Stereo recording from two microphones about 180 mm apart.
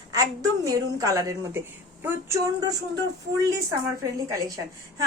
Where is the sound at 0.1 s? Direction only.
20° right (ahead or behind).